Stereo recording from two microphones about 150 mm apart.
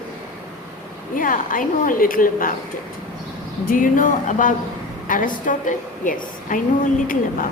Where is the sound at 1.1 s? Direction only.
65° left (ahead or behind).